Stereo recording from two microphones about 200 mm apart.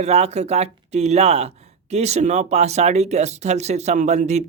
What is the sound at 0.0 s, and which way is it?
Speech, 30° right (ahead or behind).